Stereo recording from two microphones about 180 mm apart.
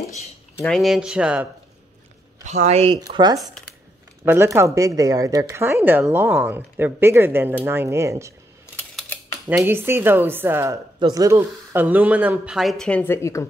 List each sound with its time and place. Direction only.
0.6 s speech: centre (ahead or behind)
2.4 s speech: 40° right (ahead or behind)
3.0 s speech: 25° right (ahead or behind)
8.7 s typing: 5° left (ahead or behind)
9.5 s speech: 10° right (ahead or behind); by 13.5 s 15° left (ahead or behind)